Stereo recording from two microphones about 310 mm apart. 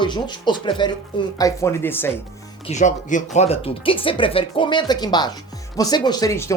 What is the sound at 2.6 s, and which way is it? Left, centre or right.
Speech, left.